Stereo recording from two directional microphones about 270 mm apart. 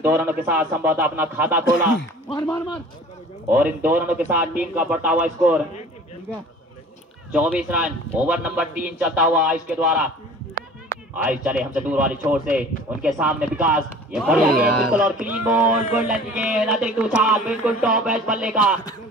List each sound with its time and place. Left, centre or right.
0.0 s speech: centre
2.2 s speech: centre
3.4 s a man's voice: centre
7.3 s a man's voice: centre
11.2 s a man's voice: centre